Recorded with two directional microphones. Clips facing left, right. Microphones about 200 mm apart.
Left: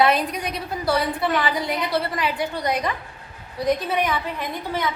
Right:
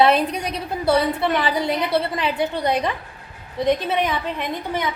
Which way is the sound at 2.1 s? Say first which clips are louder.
Right 3 dB; 30° right (ahead or behind).